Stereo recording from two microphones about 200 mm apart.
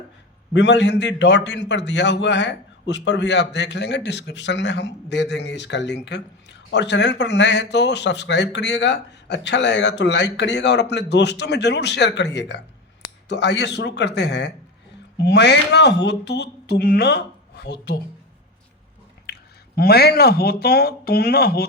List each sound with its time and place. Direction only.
0.5 s a man's voice: 60° left (ahead or behind)
19.3 s speech: 50° left (ahead or behind)